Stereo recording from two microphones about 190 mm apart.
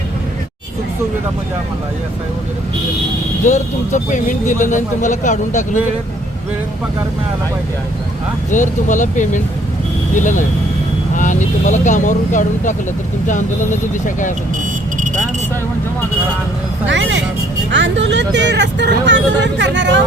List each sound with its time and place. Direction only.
3.4 s speech: 40° left (ahead or behind)
8.4 s speech: 40° left (ahead or behind)
16.8 s speech: 75° right (ahead or behind)